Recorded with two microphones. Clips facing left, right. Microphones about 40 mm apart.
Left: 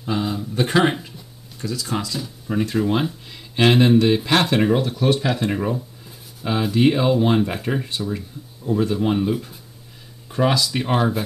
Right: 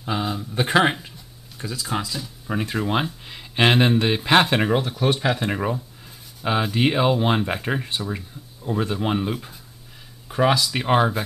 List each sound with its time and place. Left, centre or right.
0.0 s speech: centre
4.6 s speech: centre